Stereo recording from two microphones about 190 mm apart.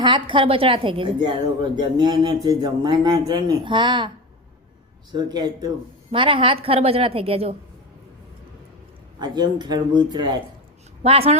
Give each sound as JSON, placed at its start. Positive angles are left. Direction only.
{"t": 0.0, "sound": "speech", "side_deg": -25}
{"t": 5.1, "sound": "speech", "side_deg": -20}
{"t": 9.1, "sound": "speech", "side_deg": -20}